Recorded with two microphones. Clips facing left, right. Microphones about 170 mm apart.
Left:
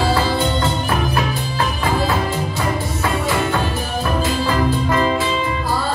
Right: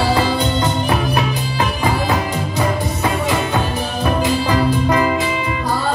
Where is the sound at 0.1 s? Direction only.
15° right (ahead or behind).